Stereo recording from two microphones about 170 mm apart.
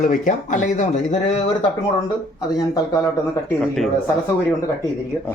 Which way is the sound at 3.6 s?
Centre (ahead or behind).